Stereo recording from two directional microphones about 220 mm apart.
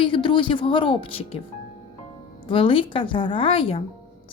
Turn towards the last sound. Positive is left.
turn(degrees=25)  # may be behind; listen again after turning